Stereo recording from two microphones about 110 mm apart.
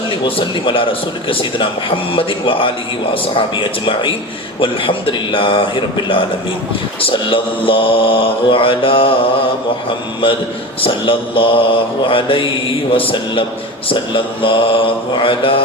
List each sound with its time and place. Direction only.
0.3 s speech: 55° left (ahead or behind)
7.0 s mantra: 50° left (ahead or behind)
10.2 s speech: 50° left (ahead or behind)
15.2 s mantra: 55° left (ahead or behind)